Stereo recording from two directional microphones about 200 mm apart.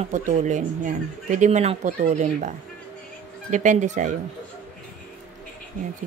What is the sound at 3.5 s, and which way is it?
Speech, 40° right (ahead or behind).